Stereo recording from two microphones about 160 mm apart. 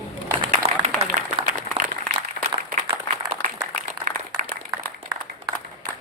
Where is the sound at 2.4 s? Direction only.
55° left (ahead or behind).